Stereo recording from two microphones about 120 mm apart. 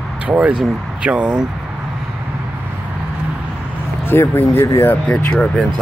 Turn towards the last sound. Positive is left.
turn(degrees=10)  # may be behind; listen again after turning